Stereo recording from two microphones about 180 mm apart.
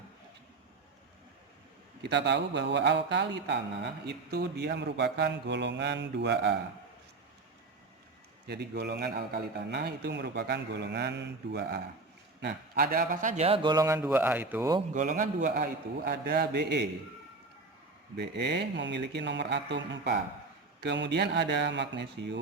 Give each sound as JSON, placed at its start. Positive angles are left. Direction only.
{"t": 2.0, "sound": "a man's voice", "side_deg": -70}
{"t": 8.4, "sound": "a man's voice", "side_deg": -65}
{"t": 14.9, "sound": "a man's voice", "side_deg": -45}
{"t": 18.2, "sound": "a man's voice", "side_deg": -70}